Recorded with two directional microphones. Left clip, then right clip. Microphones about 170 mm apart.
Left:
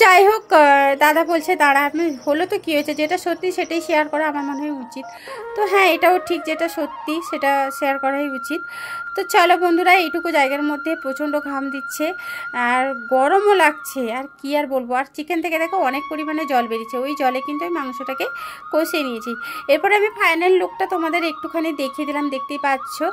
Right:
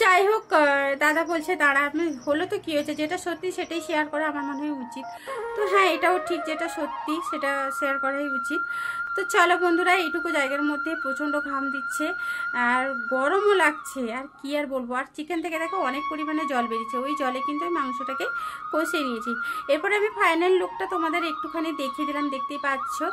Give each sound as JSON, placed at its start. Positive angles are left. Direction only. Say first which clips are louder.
{"t": 0.0, "sound": "a woman's voice", "louder": "left 8 dB", "side_deg": 45}
{"t": 5.6, "sound": "a woman's voice", "louder": "left 6 dB", "side_deg": 30}